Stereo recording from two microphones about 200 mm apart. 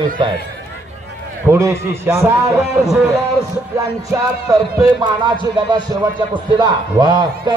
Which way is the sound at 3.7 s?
15° right (ahead or behind).